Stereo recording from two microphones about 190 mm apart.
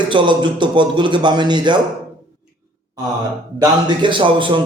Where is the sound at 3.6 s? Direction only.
25° right (ahead or behind).